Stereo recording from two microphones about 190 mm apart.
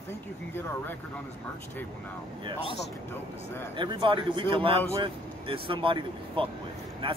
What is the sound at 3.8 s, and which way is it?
Speech, 25° right (ahead or behind).